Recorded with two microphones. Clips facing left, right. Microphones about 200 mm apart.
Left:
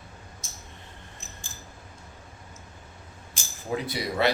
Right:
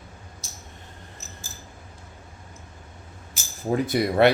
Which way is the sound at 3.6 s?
45° right (ahead or behind).